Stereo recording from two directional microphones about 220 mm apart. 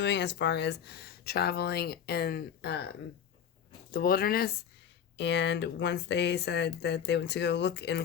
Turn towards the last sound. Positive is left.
turn(degrees=50)  # may be behind; listen again after turning